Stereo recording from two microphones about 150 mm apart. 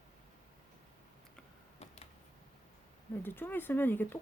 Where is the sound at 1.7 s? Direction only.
45° left (ahead or behind).